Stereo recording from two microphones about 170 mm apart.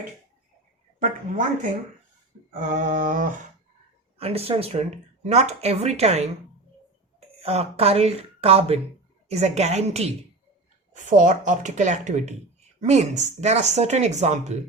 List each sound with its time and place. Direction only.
0.9 s speech: 50° right (ahead or behind)
4.2 s speech: 35° right (ahead or behind)